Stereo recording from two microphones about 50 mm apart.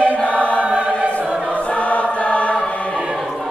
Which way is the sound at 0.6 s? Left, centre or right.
Right.